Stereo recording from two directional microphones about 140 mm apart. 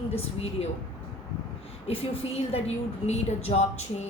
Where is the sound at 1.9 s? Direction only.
45° left (ahead or behind).